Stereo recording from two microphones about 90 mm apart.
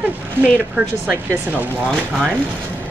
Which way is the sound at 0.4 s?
15° right (ahead or behind).